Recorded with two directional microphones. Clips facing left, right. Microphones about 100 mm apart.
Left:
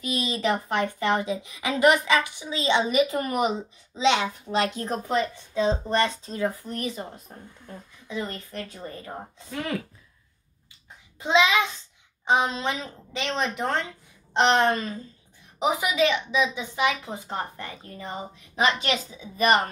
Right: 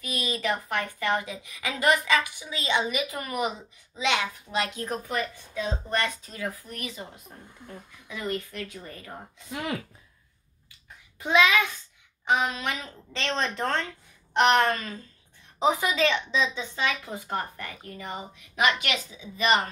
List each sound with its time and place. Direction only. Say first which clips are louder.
0.0 s a woman's voice: left 4 dB; 25° left (ahead or behind)
2.8 s a woman's voice: left 7 dB; 35° left (ahead or behind)
11.1 s a woman's voice: left 1 dB; 20° left (ahead or behind)
13.1 s a woman's voice: left 1 dB; 10° left (ahead or behind); by 19.7 s 45° left (ahead or behind)